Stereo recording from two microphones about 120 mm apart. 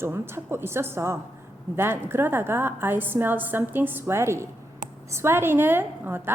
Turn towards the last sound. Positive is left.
turn(degrees=-20)  # may be behind; listen again after turning